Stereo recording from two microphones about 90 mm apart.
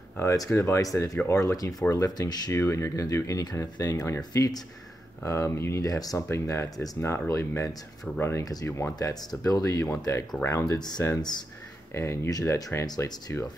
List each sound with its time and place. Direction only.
0.2 s speech: 35° left (ahead or behind)
2.5 s speech: 35° left (ahead or behind)
4.2 s speech: 45° left (ahead or behind)
5.2 s speech: 30° left (ahead or behind)
5.8 s speech: 40° left (ahead or behind)
6.2 s speech: 30° left (ahead or behind)
8.9 s speech: 45° left (ahead or behind)
11.9 s speech: 30° left (ahead or behind)